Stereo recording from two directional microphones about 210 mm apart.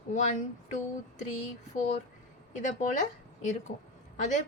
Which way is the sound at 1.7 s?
35° left (ahead or behind).